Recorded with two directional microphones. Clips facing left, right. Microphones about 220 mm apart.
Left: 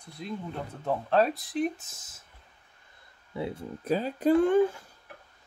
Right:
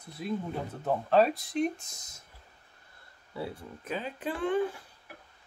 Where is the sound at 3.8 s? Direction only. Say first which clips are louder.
Left 10 dB; 35° left (ahead or behind).